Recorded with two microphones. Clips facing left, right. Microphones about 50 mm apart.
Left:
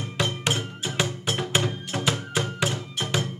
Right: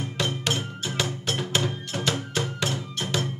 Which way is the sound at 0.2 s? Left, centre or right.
Centre.